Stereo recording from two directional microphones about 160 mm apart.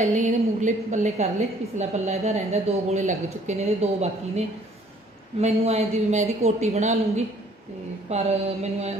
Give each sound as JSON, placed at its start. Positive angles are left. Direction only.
{"t": 0.0, "sound": "a woman's voice", "side_deg": -50}